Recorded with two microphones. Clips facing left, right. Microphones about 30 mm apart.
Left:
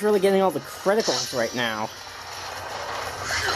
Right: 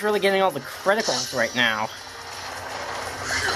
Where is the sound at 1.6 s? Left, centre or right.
Centre.